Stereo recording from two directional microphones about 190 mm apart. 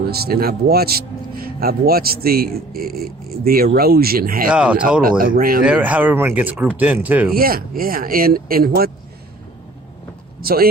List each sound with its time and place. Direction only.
0.1 s a man's voice: 55° right (ahead or behind)
4.5 s speech: 5° right (ahead or behind)
5.0 s a man's voice: 50° right (ahead or behind)
5.6 s speech: 5° right (ahead or behind)
7.3 s a man's voice: 50° right (ahead or behind)
10.4 s a man's voice: 50° right (ahead or behind)